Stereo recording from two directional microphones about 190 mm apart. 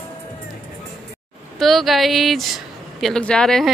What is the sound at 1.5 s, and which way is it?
Speech, centre (ahead or behind).